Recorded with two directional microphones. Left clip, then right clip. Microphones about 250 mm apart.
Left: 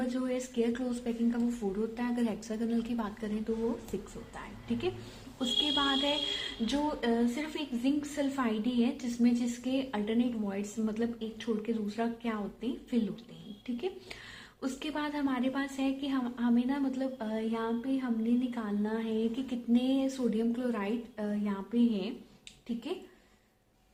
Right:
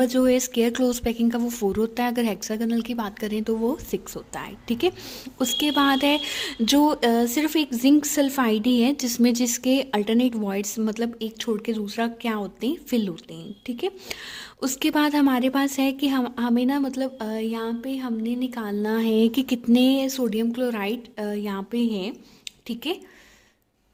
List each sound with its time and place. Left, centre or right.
0.0 s a woman's voice: right
5.4 s a woman's voice: right